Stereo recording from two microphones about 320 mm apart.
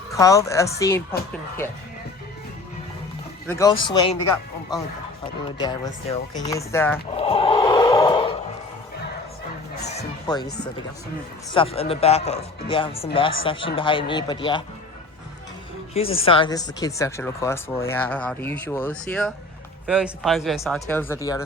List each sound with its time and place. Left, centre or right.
0.1 s speech: centre
3.4 s speech: centre
5.6 s speech: centre
7.2 s a sound: centre
9.8 s music: centre
11.5 s speech: centre
16.0 s speech: centre